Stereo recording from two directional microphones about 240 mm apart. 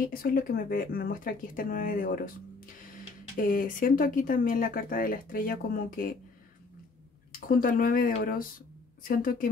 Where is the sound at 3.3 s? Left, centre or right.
Left.